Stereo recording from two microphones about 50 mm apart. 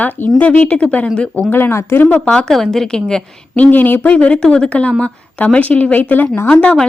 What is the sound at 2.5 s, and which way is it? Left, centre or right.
Speech, centre.